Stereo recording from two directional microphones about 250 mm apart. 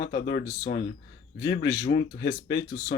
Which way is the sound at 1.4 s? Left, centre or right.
Left.